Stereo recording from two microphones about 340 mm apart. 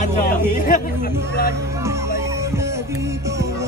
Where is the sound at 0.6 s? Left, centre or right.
Left.